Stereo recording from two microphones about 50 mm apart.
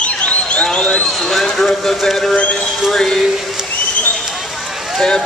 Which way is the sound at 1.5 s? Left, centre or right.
Centre.